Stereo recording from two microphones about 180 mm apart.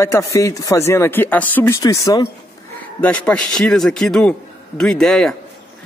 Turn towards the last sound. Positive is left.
turn(degrees=5)  # may be behind; listen again after turning